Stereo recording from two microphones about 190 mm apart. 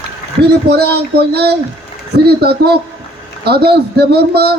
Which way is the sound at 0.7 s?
60° right (ahead or behind).